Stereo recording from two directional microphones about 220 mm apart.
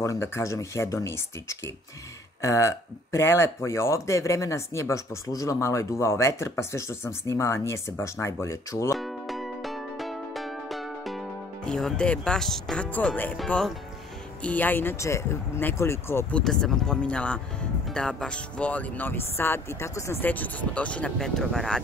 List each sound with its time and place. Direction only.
0.0 s speech: 10° left (ahead or behind)
8.9 s music: centre (ahead or behind)
14.4 s speech: 5° left (ahead or behind)